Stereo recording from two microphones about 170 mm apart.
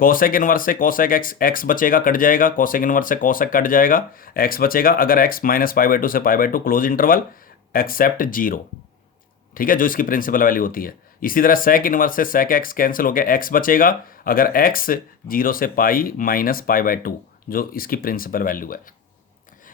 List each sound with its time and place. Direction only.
0.0 s speech: 55° left (ahead or behind)